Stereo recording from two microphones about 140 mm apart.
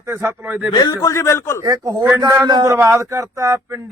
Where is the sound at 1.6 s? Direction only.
25° right (ahead or behind).